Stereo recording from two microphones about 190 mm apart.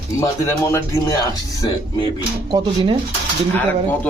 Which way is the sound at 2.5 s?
25° right (ahead or behind).